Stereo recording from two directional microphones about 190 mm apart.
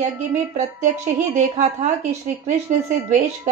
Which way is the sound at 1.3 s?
40° right (ahead or behind).